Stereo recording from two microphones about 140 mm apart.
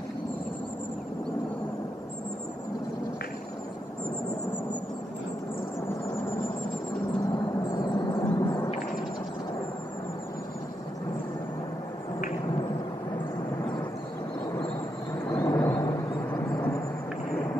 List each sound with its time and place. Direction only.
7.6 s vehicle: 30° left (ahead or behind)
15.2 s vehicle: 20° left (ahead or behind)